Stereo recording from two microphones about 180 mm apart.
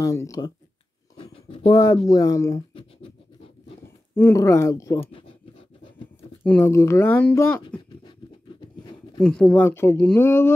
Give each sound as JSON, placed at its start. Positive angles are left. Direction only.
{"t": 0.0, "sound": "speech", "side_deg": 15}
{"t": 1.1, "sound": "a sound", "side_deg": 30}
{"t": 1.7, "sound": "speech", "side_deg": 20}
{"t": 4.1, "sound": "speech", "side_deg": 15}
{"t": 6.4, "sound": "speech", "side_deg": 10}
{"t": 8.0, "sound": "writing", "side_deg": 25}
{"t": 9.2, "sound": "speech", "side_deg": 5}